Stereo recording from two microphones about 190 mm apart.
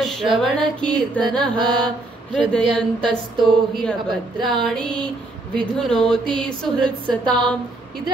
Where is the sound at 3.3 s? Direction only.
Centre (ahead or behind).